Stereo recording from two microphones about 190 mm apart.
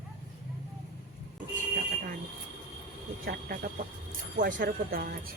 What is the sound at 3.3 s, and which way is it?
Speech, 50° right (ahead or behind).